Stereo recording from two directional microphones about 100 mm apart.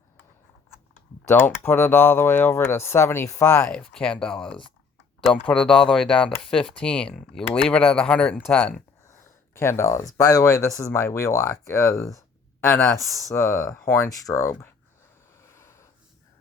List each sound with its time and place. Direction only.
1.2 s speech: 25° left (ahead or behind)
3.7 s speech: 10° left (ahead or behind)
7.1 s speech: 5° right (ahead or behind)
7.5 s speech: 10° left (ahead or behind)
9.6 s speech: 25° left (ahead or behind)
15.4 s snort: 30° left (ahead or behind)